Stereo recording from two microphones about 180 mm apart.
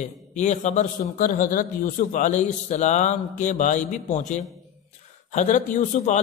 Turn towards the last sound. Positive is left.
turn(degrees=40)  # may be behind; listen again after turning